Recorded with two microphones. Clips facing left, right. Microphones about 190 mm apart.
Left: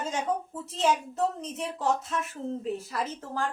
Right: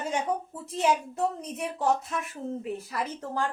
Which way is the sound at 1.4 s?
10° right (ahead or behind).